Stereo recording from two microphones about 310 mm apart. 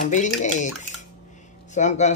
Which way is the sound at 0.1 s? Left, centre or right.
Left.